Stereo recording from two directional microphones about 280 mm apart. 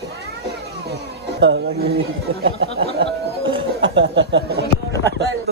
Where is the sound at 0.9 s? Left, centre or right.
Right.